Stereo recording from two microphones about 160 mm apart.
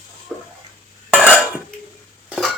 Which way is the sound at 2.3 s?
Centre (ahead or behind).